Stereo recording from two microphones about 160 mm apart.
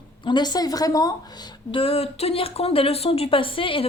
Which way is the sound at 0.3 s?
25° left (ahead or behind).